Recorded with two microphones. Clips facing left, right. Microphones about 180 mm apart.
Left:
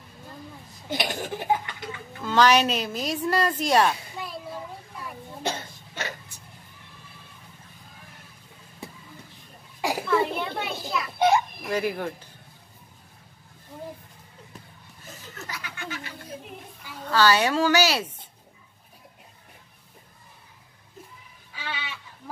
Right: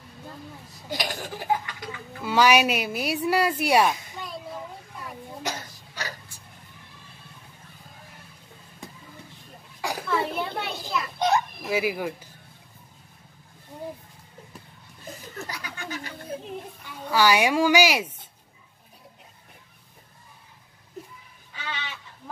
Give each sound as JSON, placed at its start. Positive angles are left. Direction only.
{"t": 0.8, "sound": "laughter", "side_deg": 20}
{"t": 2.2, "sound": "a woman's voice", "side_deg": -10}
{"t": 5.4, "sound": "cough", "side_deg": 25}
{"t": 9.8, "sound": "a sound", "side_deg": 15}
{"t": 10.0, "sound": "children playing", "side_deg": 0}
{"t": 11.6, "sound": "a woman's voice", "side_deg": -5}
{"t": 15.4, "sound": "a sound", "side_deg": -40}
{"t": 17.0, "sound": "a woman's voice", "side_deg": -10}
{"t": 21.5, "sound": "fowl", "side_deg": 5}